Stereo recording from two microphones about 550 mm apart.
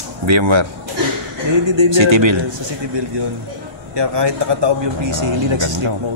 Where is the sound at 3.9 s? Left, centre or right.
Right.